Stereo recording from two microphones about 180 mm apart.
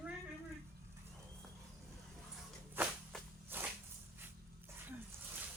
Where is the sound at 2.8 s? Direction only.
10° right (ahead or behind).